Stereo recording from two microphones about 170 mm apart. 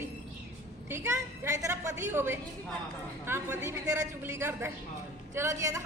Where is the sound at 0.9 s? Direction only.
15° right (ahead or behind).